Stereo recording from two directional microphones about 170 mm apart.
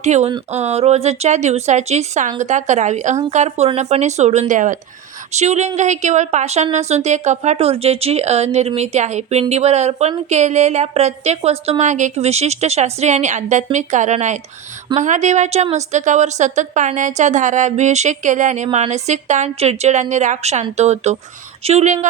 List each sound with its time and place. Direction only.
0.0 s a woman's voice: 40° right (ahead or behind)